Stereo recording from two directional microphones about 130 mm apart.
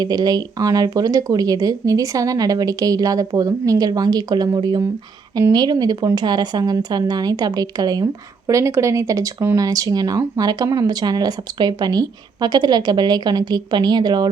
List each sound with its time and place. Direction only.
0.0 s speech: 30° right (ahead or behind)